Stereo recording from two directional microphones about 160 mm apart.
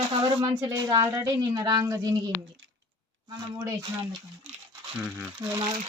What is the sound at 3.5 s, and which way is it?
Speech, 20° right (ahead or behind).